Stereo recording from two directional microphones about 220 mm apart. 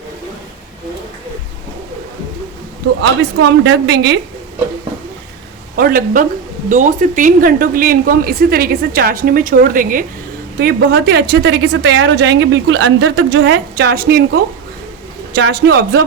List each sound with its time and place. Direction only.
3.6 s a woman's voice: 50° right (ahead or behind)
5.7 s a woman's voice: 40° right (ahead or behind)